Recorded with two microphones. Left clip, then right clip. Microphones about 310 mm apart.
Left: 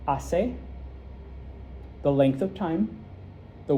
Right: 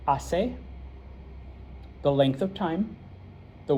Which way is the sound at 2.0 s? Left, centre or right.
Right.